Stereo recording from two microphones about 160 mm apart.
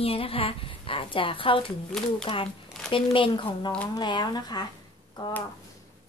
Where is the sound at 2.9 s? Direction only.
30° left (ahead or behind).